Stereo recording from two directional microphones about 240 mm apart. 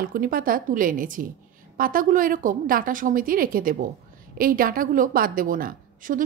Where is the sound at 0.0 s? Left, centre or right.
Right.